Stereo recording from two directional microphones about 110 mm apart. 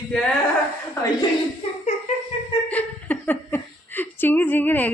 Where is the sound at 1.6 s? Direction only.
60° left (ahead or behind).